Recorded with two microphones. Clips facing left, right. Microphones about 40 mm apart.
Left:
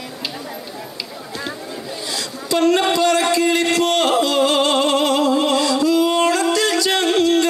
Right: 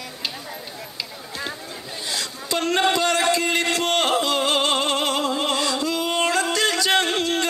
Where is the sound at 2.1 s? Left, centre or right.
Right.